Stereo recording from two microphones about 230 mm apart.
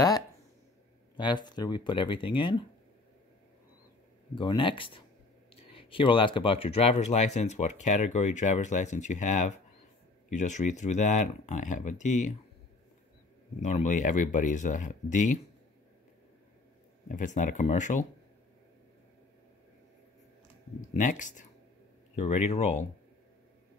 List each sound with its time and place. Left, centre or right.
1.1 s speech: centre
4.4 s speech: left
13.6 s speech: left
17.1 s speech: left
20.9 s speech: left